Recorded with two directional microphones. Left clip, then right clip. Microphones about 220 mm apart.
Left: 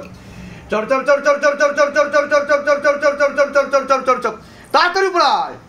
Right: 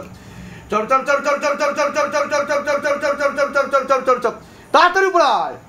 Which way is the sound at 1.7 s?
25° right (ahead or behind).